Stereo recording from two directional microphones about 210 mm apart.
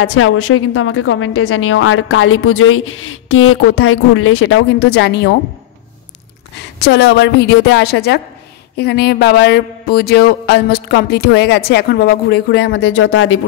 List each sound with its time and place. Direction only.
0.0 s a woman's voice: 90° left; by 5.3 s 55° left (ahead or behind)
6.6 s a sound: 55° left (ahead or behind)
12.9 s speech: 85° left